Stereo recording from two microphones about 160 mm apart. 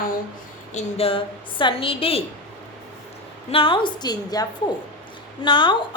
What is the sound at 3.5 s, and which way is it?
Speech, 35° left (ahead or behind).